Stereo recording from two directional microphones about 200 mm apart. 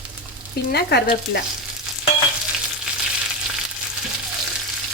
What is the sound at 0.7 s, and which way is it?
Speech, 55° left (ahead or behind).